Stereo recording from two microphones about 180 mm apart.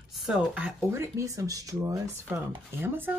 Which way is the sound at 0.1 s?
5° right (ahead or behind).